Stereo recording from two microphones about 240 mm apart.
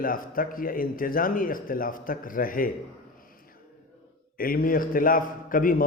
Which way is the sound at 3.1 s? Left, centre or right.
Left.